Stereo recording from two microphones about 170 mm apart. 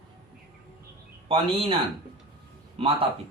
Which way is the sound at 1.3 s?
30° right (ahead or behind).